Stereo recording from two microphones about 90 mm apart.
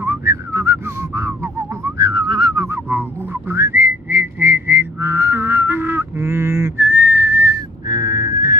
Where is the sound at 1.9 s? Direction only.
45° right (ahead or behind).